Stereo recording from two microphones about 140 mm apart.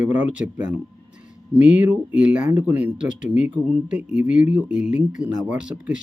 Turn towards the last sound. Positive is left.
turn(degrees=-5)  # may be behind; listen again after turning